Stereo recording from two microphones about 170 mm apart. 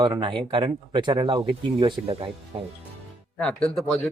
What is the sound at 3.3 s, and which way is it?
Speech, 5° left (ahead or behind).